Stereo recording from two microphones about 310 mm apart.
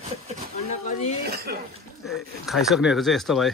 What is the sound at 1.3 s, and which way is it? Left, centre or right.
Speech, right.